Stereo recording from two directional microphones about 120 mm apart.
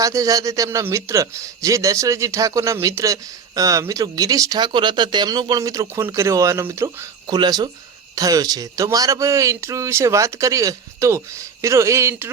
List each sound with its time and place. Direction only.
0.0 s a man's voice: 30° right (ahead or behind)
7.3 s a man's voice: 35° right (ahead or behind)